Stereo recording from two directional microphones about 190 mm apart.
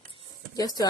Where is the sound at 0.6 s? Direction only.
20° left (ahead or behind).